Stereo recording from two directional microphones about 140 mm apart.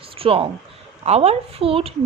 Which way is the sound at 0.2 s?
40° right (ahead or behind).